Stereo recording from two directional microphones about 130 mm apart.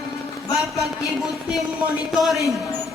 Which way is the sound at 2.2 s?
Centre (ahead or behind).